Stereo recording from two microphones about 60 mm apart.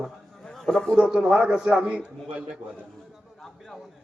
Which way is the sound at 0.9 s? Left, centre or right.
Centre.